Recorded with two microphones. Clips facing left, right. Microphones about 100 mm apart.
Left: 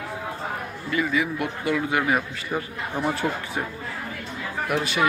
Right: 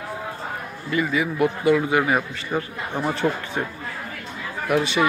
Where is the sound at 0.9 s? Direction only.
Centre (ahead or behind).